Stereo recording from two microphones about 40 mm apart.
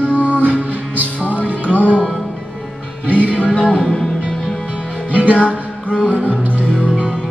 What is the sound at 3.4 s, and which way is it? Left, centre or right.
Music, left.